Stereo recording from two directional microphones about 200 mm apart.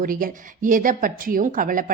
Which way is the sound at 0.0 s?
45° right (ahead or behind).